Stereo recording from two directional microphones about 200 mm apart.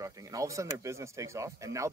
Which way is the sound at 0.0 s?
15° right (ahead or behind).